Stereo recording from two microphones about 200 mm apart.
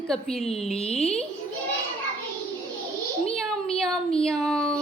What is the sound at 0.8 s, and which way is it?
Speech, 30° left (ahead or behind).